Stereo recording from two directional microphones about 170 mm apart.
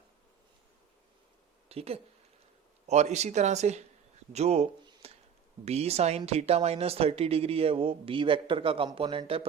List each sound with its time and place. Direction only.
1.7 s speech: 35° right (ahead or behind)